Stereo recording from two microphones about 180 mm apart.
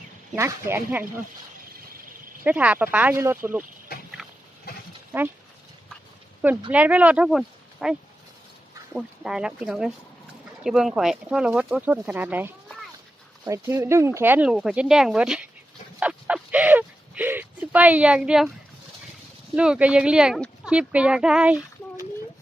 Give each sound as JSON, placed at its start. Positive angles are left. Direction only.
{"t": 0.3, "sound": "speech", "side_deg": -15}
{"t": 2.4, "sound": "speech", "side_deg": -10}
{"t": 4.2, "sound": "goat", "side_deg": 0}
{"t": 5.1, "sound": "speech", "side_deg": -10}
{"t": 6.7, "sound": "speech", "side_deg": -10}
{"t": 16.0, "sound": "a sound", "side_deg": -10}
{"t": 19.5, "sound": "speech", "side_deg": -5}